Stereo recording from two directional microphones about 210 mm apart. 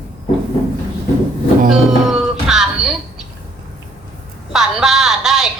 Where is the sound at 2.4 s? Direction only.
5° right (ahead or behind).